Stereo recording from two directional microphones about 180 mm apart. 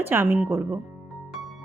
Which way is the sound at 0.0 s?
10° right (ahead or behind).